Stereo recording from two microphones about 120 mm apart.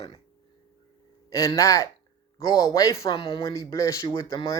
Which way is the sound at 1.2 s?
25° left (ahead or behind).